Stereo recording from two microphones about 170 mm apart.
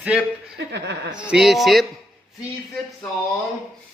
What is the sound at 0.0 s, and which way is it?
A man's voice, 5° right (ahead or behind).